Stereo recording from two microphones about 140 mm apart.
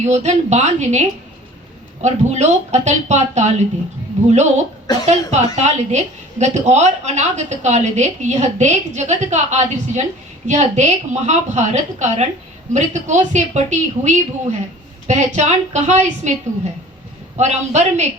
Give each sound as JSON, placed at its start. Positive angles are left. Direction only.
{"t": 0.0, "sound": "a woman's voice", "side_deg": -55}